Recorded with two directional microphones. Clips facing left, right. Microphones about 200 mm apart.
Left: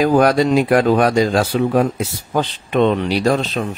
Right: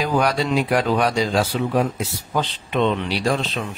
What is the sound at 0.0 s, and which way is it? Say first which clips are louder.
Speech: left 7 dB; 50° left (ahead or behind).